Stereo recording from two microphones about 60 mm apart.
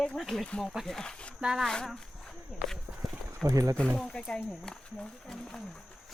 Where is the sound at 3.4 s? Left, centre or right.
Right.